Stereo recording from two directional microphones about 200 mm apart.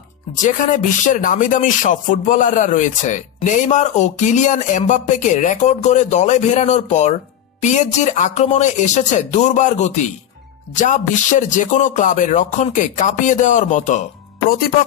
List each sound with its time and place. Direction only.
0.4 s speech: 40° left (ahead or behind)